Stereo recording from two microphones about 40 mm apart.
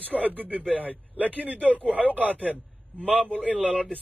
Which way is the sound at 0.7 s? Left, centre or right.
Right.